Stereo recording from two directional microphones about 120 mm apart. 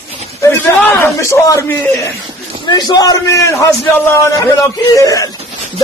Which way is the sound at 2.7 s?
35° left (ahead or behind).